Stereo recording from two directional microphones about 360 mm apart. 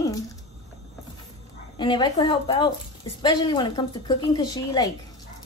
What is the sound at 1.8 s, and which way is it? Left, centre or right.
A woman's voice, centre.